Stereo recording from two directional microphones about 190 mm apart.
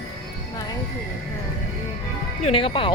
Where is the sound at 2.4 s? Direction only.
30° left (ahead or behind).